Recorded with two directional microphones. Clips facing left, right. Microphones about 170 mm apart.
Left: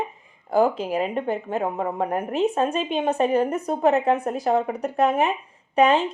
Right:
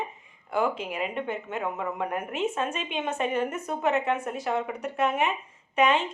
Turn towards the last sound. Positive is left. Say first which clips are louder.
# left 5 dB
turn(degrees=35)  # may be behind; listen again after turning